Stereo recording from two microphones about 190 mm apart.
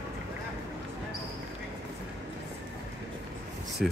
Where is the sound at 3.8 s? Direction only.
Centre (ahead or behind).